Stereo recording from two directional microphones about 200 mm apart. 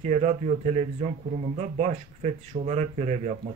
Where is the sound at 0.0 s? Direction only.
35° right (ahead or behind).